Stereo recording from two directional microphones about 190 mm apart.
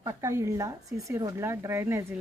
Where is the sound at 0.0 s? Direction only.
15° right (ahead or behind).